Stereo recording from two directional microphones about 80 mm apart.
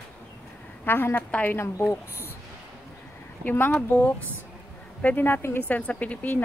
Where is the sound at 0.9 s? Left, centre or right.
Left.